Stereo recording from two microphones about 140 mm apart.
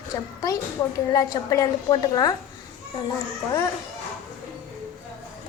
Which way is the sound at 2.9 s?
40° left (ahead or behind).